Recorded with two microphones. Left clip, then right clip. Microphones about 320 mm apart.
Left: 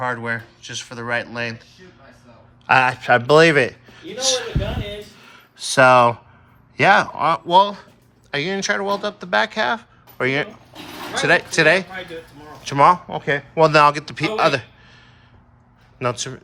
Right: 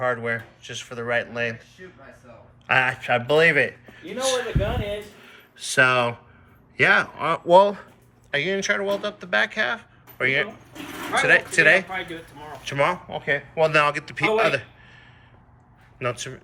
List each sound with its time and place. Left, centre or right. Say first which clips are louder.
0.0 s speech: left 1 dB; centre
2.6 s a man's voice: left 6 dB; centre
5.2 s a sound: left 5 dB; centre
6.7 s a man's voice: left 4 dB; centre